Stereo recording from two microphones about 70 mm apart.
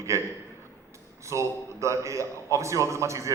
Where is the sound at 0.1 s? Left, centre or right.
Right.